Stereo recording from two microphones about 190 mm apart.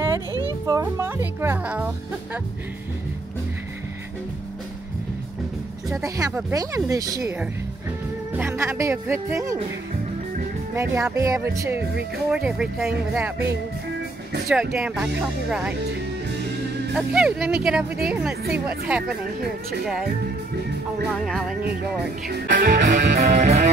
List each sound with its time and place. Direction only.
0.7 s speech: 15° right (ahead or behind)
5.9 s speech: 15° right (ahead or behind)
10.7 s speech: 15° right (ahead or behind)
12.3 s speech: 5° right (ahead or behind)
14.5 s speech: centre (ahead or behind)
16.9 s speech: 5° right (ahead or behind)
21.1 s speech: centre (ahead or behind)
22.6 s music: 50° right (ahead or behind)
23.4 s music: 35° right (ahead or behind)